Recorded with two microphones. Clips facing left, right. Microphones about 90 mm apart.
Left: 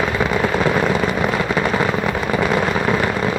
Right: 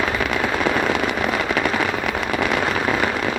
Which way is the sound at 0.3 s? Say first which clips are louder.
Left 3 dB; centre (ahead or behind).